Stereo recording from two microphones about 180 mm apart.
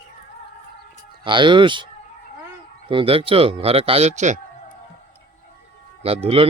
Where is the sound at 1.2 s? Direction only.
25° right (ahead or behind).